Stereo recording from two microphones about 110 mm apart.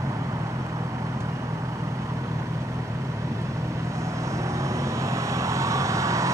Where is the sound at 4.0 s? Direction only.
25° right (ahead or behind).